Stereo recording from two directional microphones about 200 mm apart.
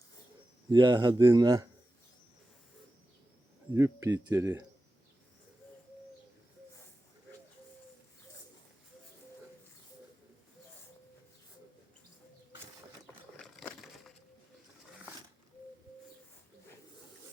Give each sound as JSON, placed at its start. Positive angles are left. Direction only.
{"t": 0.7, "sound": "speech", "side_deg": -20}
{"t": 3.8, "sound": "speech", "side_deg": -15}
{"t": 13.3, "sound": "a sound", "side_deg": 5}